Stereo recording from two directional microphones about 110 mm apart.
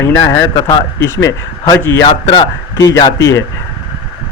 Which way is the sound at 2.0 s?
50° left (ahead or behind).